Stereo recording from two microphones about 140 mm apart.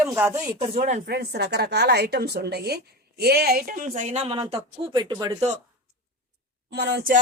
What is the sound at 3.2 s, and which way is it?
Speech, 90° right.